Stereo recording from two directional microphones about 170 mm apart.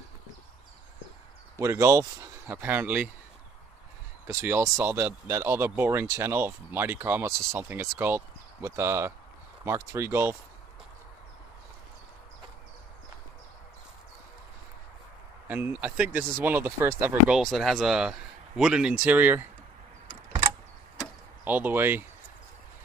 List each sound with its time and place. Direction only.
1.6 s speech: 20° right (ahead or behind)
4.3 s speech: 15° right (ahead or behind)
15.4 s speech: 10° right (ahead or behind)
17.4 s speech: centre (ahead or behind)
21.5 s speech: 10° right (ahead or behind)